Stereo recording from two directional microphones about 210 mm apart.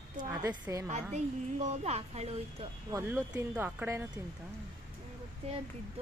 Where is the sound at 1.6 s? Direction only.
30° right (ahead or behind).